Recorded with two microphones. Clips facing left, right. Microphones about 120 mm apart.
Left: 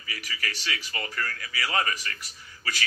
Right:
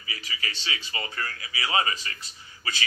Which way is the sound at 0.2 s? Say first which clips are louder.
Left 1 dB; 20° right (ahead or behind).